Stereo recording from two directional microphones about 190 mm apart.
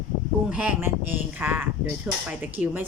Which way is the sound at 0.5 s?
5° right (ahead or behind).